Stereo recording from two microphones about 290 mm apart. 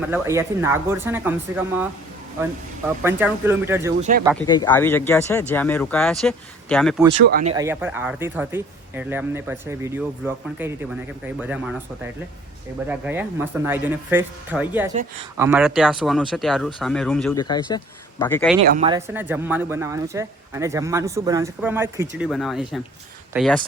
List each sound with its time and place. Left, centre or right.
0.1 s speech: centre
3.0 s speech: centre
4.4 s speech: centre
7.3 s speech: right
7.5 s speech: centre
12.9 s speech: centre
17.3 s speech: centre
18.7 s speech: right
18.9 s speech: centre